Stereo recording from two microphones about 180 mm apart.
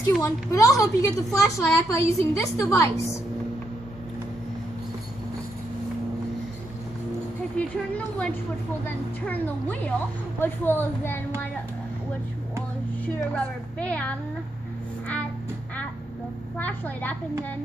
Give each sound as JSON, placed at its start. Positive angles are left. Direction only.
{"t": 0.0, "sound": "a woman's voice", "side_deg": 15}
{"t": 7.5, "sound": "a sound", "side_deg": 5}
{"t": 8.8, "sound": "a woman's voice", "side_deg": 10}
{"t": 13.0, "sound": "a woman's voice", "side_deg": 5}
{"t": 16.5, "sound": "a woman's voice", "side_deg": 10}